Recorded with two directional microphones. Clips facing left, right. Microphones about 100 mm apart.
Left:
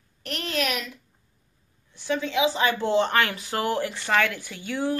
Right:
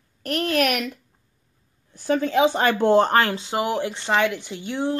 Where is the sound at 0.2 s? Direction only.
50° right (ahead or behind).